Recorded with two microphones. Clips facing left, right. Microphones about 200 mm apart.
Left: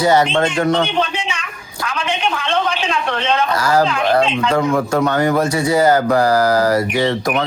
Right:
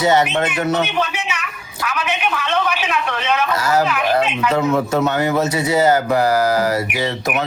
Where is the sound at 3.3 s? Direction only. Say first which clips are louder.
Left 1 dB; 30° left (ahead or behind).